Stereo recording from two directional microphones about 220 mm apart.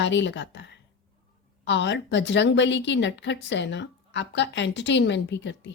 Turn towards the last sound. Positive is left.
turn(degrees=55)  # may be behind; listen again after turning